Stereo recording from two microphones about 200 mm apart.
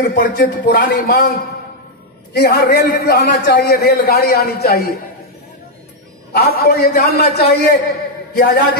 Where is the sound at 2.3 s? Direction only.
50° left (ahead or behind).